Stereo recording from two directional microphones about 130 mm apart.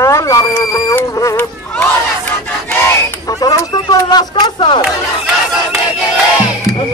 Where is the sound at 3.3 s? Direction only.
25° left (ahead or behind).